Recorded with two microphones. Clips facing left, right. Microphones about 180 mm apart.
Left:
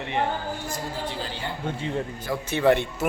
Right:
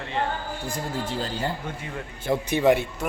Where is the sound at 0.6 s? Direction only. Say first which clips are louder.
Right 2 dB; 50° right (ahead or behind).